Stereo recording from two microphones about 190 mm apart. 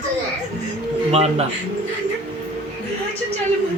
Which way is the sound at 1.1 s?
35° right (ahead or behind).